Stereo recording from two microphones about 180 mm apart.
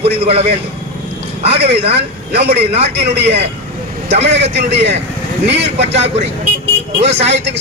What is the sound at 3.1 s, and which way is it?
Speech, 70° right (ahead or behind).